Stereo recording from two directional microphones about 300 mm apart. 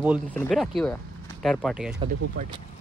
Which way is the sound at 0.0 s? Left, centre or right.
Centre.